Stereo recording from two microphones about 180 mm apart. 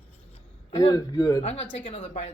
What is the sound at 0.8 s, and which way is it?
Speech, 15° left (ahead or behind).